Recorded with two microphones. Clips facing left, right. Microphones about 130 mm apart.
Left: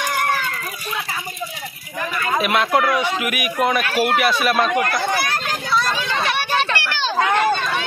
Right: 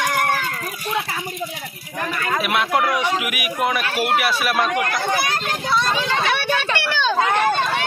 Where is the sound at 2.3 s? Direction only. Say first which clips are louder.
Left 2 dB; 5° right (ahead or behind).